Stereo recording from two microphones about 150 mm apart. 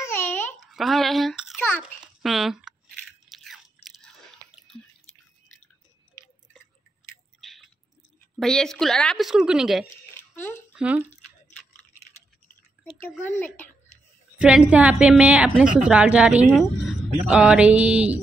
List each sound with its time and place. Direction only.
0.0 s babbling: 15° left (ahead or behind)
0.6 s a sound: centre (ahead or behind)
2.0 s biting: centre (ahead or behind)
7.3 s chewing: centre (ahead or behind)
8.4 s a woman's voice: 5° left (ahead or behind)
10.1 s a sound: 15° left (ahead or behind)
10.7 s speech: 10° right (ahead or behind)
13.2 s speech: 10° left (ahead or behind)
14.4 s a woman's voice: 10° right (ahead or behind)